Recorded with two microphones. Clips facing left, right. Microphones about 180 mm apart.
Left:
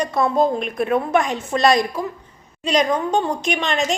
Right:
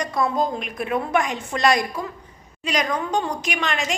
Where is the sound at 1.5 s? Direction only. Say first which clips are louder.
Left 4 dB; 25° left (ahead or behind).